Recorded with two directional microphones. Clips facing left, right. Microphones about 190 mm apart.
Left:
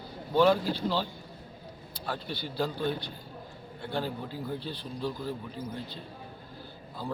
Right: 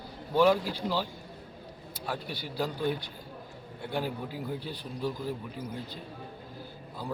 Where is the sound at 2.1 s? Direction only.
10° right (ahead or behind).